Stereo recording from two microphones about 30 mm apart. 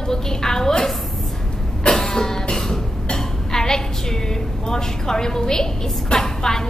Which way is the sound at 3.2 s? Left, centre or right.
Centre.